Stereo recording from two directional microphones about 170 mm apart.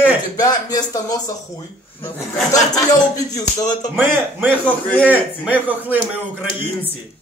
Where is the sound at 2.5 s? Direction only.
20° left (ahead or behind).